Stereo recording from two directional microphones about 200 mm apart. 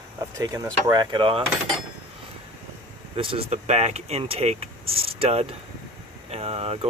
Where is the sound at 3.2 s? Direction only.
30° right (ahead or behind).